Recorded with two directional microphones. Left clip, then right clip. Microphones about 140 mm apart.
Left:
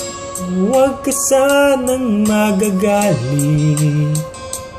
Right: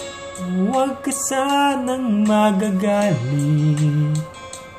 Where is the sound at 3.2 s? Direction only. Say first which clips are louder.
Left 5 dB; 20° left (ahead or behind).